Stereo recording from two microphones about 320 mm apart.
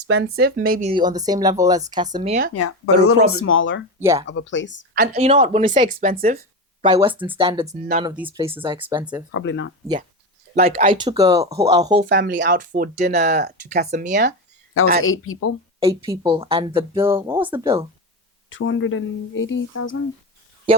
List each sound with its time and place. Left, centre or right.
0.1 s speech: right
2.6 s speech: left
4.0 s speech: centre
4.3 s speech: left
4.9 s speech: right
6.8 s speech: centre
9.3 s speech: left
10.5 s speech: right
10.9 s speech: centre
12.0 s speech: right
15.0 s speech: left
15.8 s speech: centre
18.4 s speech: left